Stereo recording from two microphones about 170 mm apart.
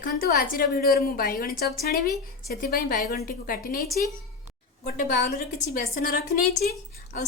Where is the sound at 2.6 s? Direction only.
65° left (ahead or behind).